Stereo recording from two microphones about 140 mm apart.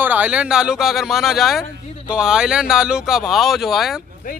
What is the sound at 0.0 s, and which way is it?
A man's voice, 10° right (ahead or behind).